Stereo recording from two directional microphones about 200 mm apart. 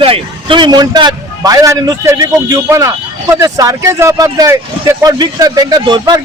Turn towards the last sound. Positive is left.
turn(degrees=-20)  # may be behind; listen again after turning